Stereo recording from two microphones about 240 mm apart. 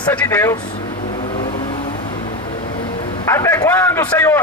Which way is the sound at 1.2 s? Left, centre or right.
Left.